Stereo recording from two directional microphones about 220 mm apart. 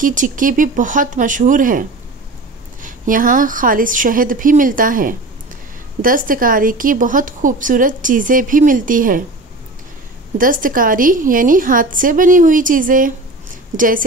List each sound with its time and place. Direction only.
0.0 s a woman's voice: 35° right (ahead or behind)
10.3 s a woman's voice: 40° right (ahead or behind)